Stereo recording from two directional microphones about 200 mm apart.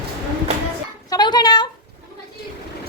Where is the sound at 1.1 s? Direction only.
20° left (ahead or behind).